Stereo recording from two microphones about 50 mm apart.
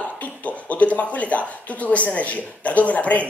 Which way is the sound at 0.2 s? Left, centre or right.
Left.